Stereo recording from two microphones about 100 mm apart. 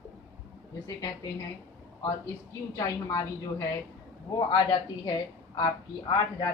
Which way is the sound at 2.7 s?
30° left (ahead or behind).